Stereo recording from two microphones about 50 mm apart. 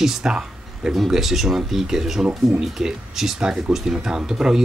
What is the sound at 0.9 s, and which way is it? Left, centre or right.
Speech, centre.